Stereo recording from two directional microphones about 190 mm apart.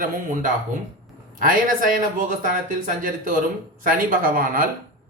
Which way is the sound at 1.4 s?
45° right (ahead or behind).